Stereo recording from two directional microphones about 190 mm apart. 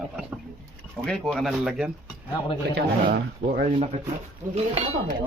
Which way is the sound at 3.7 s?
30° right (ahead or behind).